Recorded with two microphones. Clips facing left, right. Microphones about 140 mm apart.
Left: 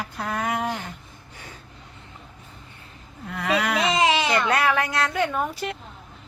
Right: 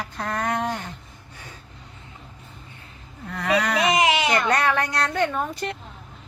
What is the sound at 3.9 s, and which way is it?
Baby cry, 30° left (ahead or behind).